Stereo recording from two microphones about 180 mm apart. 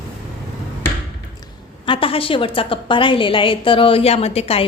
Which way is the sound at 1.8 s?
30° left (ahead or behind).